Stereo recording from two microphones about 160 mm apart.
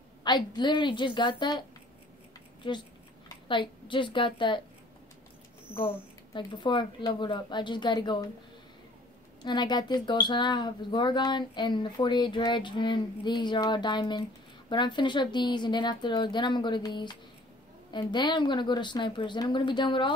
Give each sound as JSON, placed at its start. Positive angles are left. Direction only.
{"t": 0.2, "sound": "a woman's voice", "side_deg": 25}
{"t": 5.8, "sound": "speech", "side_deg": 30}
{"t": 9.4, "sound": "speech", "side_deg": 30}